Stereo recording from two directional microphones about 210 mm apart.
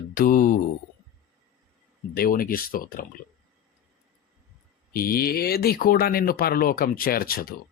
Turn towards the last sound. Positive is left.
turn(degrees=45)  # may be behind; listen again after turning